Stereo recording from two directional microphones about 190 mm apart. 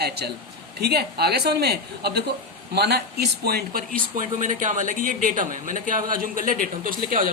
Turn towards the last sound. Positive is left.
turn(degrees=-45)  # may be behind; listen again after turning